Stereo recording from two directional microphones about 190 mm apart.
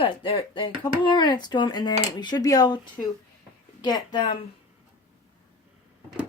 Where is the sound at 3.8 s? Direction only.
20° left (ahead or behind).